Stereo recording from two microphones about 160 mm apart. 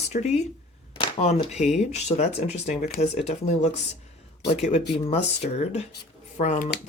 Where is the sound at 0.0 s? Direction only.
45° left (ahead or behind).